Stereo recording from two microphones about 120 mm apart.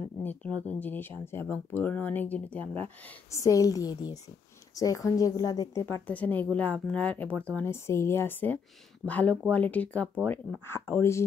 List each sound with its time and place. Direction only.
0.2 s speech: 15° left (ahead or behind)
3.3 s a woman's voice: 25° left (ahead or behind)
5.9 s speech: 15° left (ahead or behind)
7.6 s a woman's voice: 20° left (ahead or behind)